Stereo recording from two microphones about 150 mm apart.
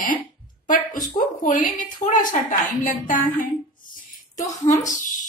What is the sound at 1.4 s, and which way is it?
Speech, 65° left (ahead or behind).